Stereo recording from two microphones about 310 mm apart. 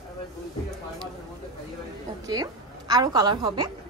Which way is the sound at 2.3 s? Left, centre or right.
Centre.